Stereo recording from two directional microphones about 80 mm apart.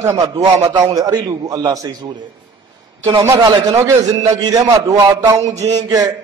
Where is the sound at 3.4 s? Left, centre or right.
Right.